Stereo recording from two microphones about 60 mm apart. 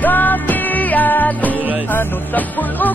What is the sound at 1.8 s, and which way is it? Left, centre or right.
Music, left.